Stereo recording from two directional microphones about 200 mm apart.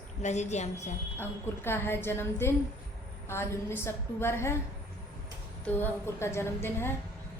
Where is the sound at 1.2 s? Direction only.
10° left (ahead or behind).